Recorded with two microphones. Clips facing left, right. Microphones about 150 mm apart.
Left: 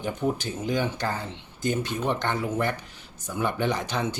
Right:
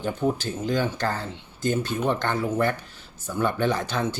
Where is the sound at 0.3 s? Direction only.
15° left (ahead or behind).